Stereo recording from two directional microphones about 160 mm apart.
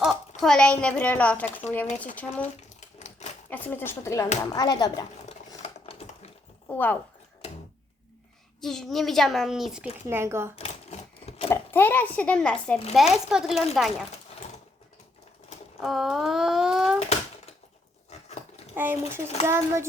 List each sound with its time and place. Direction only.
0.0 s a child's voice: centre (ahead or behind)
3.5 s speech: 10° left (ahead or behind)
5.6 s a sound: 40° left (ahead or behind)
6.7 s speech: 10° left (ahead or behind)
7.4 s a sound: 40° left (ahead or behind)
8.6 s a child's voice: centre (ahead or behind)
10.1 s speech: 15° right (ahead or behind)
10.5 s typewriter: 40° left (ahead or behind)
11.4 s a child's voice: 15° left (ahead or behind); by 14.0 s centre (ahead or behind)
15.8 s a child's voice: centre (ahead or behind)
18.1 s a sound: 40° left (ahead or behind)
18.8 s speech: 15° right (ahead or behind)